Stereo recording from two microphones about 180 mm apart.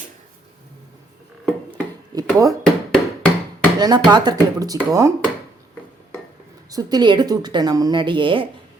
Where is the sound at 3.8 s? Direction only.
25° right (ahead or behind).